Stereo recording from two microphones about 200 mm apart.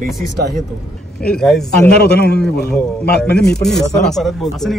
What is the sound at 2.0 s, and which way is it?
Speech, 55° left (ahead or behind).